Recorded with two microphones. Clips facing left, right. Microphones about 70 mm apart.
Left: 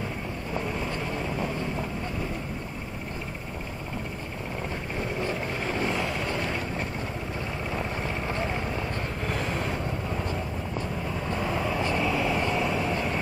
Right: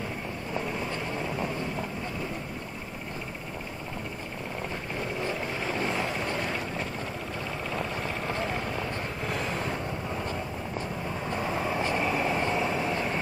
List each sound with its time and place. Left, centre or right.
5.9 s vehicle: right
7.7 s vehicle: centre
9.3 s vehicle: left
11.2 s vehicle: centre
11.7 s vehicle: right
12.3 s vehicle: right